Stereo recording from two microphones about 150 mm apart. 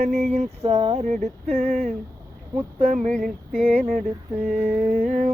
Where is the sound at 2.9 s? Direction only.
60° right (ahead or behind).